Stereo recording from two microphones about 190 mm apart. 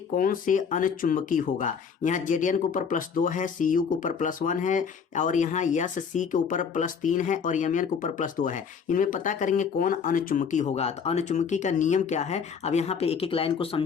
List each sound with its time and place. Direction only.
0.2 s speech: 45° left (ahead or behind); by 13.8 s 30° left (ahead or behind)